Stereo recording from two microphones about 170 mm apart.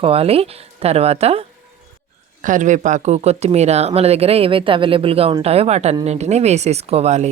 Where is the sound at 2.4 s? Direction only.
50° right (ahead or behind).